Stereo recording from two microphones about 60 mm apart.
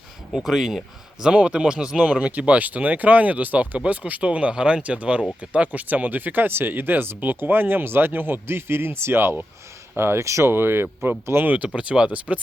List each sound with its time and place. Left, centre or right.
0.3 s speech: centre
1.2 s speech: centre; by 10.5 s right
10.5 s speech: right
11.4 s speech: right